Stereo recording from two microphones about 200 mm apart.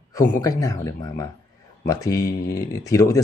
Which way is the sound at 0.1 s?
15° left (ahead or behind).